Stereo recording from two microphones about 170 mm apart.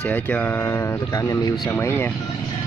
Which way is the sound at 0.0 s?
10° left (ahead or behind).